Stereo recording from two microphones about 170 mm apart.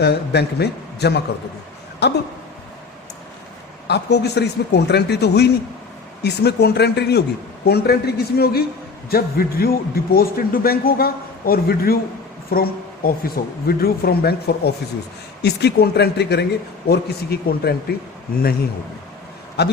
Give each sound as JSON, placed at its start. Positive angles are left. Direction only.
{"t": 0.0, "sound": "speech", "side_deg": 80}
{"t": 3.8, "sound": "a man's voice", "side_deg": 80}
{"t": 19.6, "sound": "speech", "side_deg": 75}